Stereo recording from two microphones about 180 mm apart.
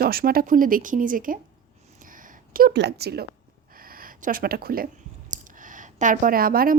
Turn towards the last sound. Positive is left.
turn(degrees=-55)  # may be behind; listen again after turning